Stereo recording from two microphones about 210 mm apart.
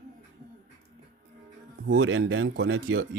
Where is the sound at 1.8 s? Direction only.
70° right (ahead or behind).